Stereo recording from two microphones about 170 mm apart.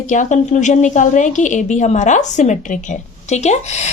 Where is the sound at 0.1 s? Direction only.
45° left (ahead or behind).